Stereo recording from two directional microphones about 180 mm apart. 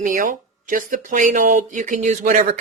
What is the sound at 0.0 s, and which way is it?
Speech, 50° right (ahead or behind).